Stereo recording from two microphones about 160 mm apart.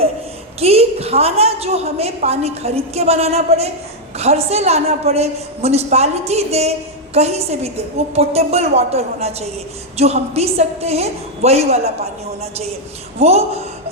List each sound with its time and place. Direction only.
0.6 s a woman's voice: 40° right (ahead or behind)
13.1 s a woman's voice: 40° right (ahead or behind)